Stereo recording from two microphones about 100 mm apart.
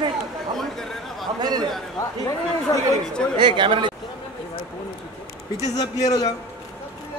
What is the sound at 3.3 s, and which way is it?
Speech, 55° right (ahead or behind).